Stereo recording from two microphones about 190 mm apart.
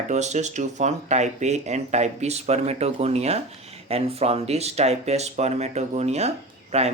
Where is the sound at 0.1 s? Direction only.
35° right (ahead or behind).